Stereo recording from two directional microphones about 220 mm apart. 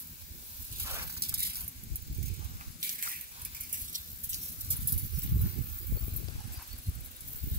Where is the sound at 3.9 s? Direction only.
35° right (ahead or behind).